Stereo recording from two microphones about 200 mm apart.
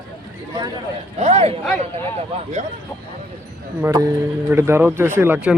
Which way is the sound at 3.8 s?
15° right (ahead or behind).